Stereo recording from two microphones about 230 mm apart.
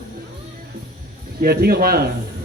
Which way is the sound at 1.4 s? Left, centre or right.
Right.